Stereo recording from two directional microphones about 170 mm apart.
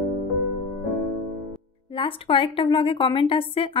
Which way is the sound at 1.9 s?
30° left (ahead or behind).